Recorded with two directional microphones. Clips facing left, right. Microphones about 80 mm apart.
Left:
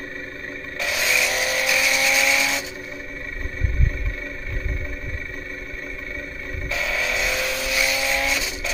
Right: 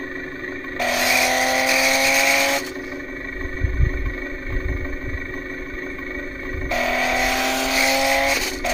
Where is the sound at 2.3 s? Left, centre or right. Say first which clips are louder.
Right 3 dB; right.